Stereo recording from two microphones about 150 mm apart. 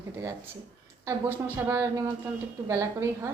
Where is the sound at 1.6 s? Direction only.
15° right (ahead or behind).